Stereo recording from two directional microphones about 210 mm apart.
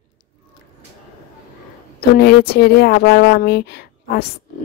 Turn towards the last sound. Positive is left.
turn(degrees=50)  # may be behind; listen again after turning